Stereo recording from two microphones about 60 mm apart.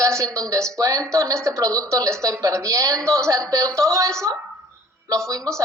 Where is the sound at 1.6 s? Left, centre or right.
Right.